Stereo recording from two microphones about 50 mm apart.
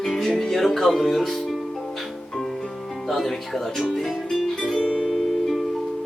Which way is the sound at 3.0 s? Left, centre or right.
Centre.